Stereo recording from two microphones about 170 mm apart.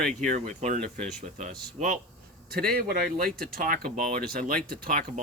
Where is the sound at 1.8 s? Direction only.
40° right (ahead or behind).